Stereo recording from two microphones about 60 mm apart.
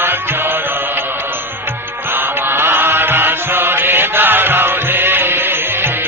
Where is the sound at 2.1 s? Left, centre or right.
Right.